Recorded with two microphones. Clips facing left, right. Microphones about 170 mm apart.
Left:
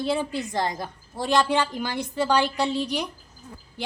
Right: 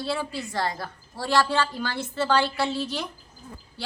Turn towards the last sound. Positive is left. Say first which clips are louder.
# left 2 dB
turn(degrees=15)  # may be behind; listen again after turning